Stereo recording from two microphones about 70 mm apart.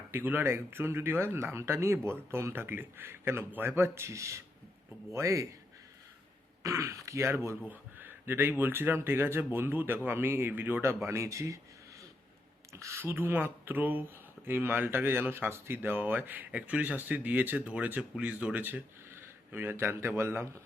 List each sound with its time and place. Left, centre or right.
0.1 s speech: right
6.6 s speech: right
7.7 s speech: right
12.8 s speech: right